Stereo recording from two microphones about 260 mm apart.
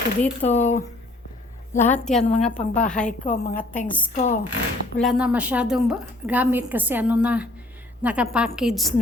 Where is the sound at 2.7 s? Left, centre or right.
Centre.